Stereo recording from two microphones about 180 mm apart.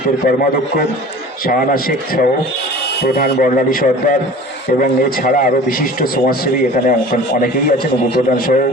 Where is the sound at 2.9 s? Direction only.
65° left (ahead or behind).